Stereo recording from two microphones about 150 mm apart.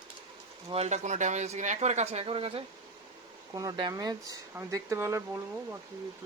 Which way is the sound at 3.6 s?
25° right (ahead or behind).